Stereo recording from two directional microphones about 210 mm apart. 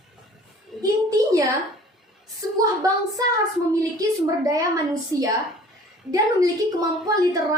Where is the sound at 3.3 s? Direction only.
15° right (ahead or behind).